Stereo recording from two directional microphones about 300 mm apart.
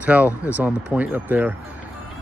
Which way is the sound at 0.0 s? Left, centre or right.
Centre.